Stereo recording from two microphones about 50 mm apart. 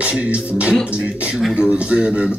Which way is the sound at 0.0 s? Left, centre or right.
Right.